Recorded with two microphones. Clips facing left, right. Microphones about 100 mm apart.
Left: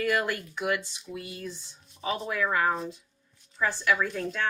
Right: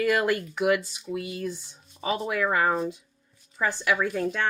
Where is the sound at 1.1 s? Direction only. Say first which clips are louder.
Right 7 dB; 80° right.